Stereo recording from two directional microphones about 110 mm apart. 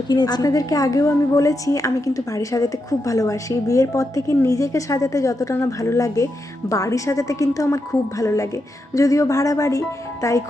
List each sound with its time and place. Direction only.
0.1 s a woman's voice: 40° left (ahead or behind)